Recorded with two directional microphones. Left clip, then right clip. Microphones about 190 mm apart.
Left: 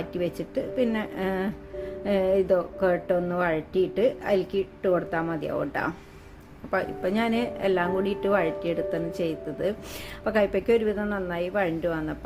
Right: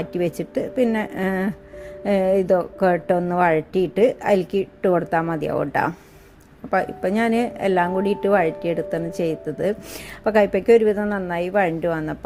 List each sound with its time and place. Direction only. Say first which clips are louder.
0.0 s a woman's voice: right 5 dB; 35° right (ahead or behind)